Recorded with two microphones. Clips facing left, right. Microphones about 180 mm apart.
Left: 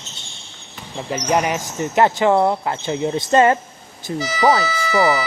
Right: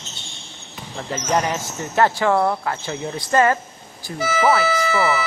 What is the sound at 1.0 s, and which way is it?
Speech, 15° left (ahead or behind).